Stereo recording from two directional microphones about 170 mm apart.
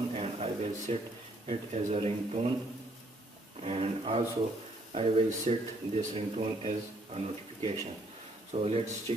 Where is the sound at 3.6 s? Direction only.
35° right (ahead or behind).